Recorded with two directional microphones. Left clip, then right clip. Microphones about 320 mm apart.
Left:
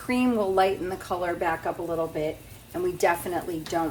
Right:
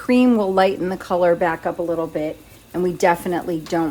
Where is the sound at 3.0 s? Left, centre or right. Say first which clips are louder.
Right 6 dB; right.